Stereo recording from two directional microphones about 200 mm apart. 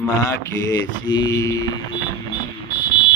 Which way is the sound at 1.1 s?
20° left (ahead or behind).